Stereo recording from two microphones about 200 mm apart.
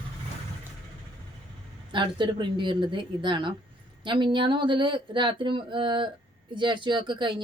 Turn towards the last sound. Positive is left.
turn(degrees=-25)  # may be behind; listen again after turning